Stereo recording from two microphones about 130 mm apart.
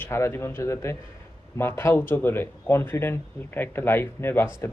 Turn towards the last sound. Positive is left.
turn(degrees=15)  # may be behind; listen again after turning